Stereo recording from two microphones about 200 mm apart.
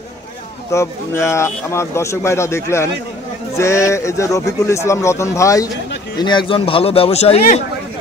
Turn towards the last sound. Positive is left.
turn(degrees=30)  # may be behind; listen again after turning